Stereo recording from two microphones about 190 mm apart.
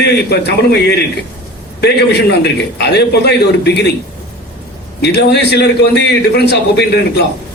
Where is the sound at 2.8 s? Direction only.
60° left (ahead or behind).